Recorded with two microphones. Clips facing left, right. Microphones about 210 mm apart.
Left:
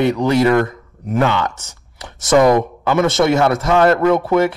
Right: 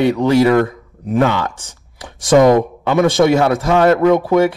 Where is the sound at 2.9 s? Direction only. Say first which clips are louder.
Right 2 dB; 15° right (ahead or behind).